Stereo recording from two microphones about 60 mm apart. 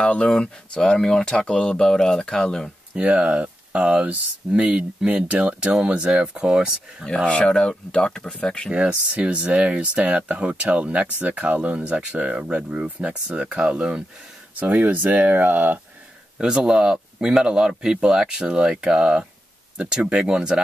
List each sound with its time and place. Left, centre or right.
0.0 s speech: centre
2.9 s speech: centre
7.2 s speech: centre
8.7 s speech: centre
14.5 s speech: right
16.3 s speech: centre